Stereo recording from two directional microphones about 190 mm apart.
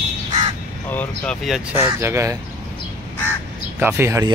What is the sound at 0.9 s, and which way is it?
Speech, 5° left (ahead or behind).